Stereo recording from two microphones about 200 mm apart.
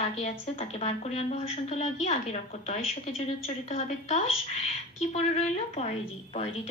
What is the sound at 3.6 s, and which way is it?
A woman's voice, 35° left (ahead or behind).